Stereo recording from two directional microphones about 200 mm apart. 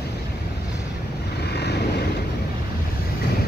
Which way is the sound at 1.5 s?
55° left (ahead or behind).